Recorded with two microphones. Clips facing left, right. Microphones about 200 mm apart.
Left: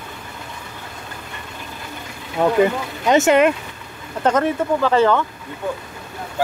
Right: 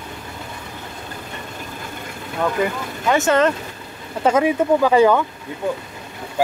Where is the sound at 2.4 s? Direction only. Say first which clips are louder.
Left 5 dB; 25° left (ahead or behind).